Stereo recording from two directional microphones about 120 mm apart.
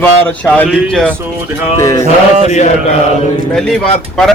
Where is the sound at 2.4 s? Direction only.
75° left (ahead or behind).